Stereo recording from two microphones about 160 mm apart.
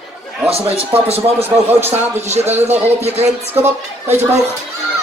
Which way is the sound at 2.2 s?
45° right (ahead or behind).